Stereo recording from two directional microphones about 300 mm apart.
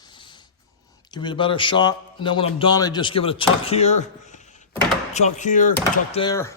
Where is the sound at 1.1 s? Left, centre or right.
Centre.